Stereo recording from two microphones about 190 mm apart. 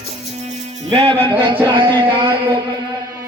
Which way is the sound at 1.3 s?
10° right (ahead or behind).